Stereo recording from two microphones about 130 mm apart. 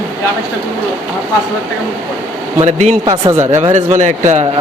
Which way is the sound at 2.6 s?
65° right (ahead or behind).